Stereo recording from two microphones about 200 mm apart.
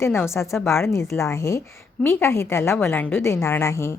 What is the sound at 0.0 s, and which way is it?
A woman's voice, 15° left (ahead or behind).